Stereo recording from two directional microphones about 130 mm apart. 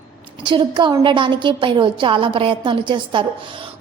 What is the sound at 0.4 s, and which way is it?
A woman's voice, 40° right (ahead or behind).